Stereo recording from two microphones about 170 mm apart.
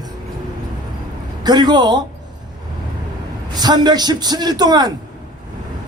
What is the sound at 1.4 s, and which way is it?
Speech, 25° right (ahead or behind).